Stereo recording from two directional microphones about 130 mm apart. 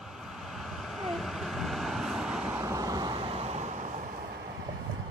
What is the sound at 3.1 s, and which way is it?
Vehicle, 45° right (ahead or behind).